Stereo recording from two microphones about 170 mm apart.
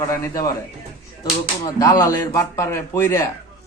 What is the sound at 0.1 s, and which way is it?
Speech, 20° left (ahead or behind).